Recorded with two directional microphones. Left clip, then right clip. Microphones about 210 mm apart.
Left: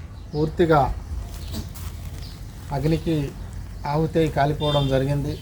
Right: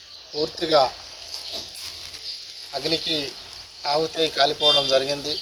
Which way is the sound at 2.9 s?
10° left (ahead or behind).